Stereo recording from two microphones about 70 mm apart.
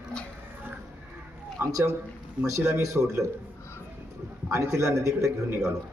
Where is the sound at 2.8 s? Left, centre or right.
Right.